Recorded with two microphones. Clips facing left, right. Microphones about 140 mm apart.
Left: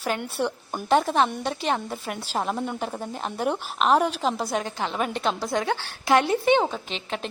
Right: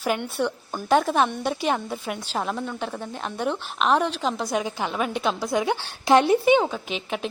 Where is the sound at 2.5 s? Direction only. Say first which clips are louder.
Left 1 dB; 20° left (ahead or behind).